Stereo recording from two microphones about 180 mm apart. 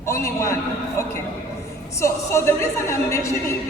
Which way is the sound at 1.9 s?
15° left (ahead or behind).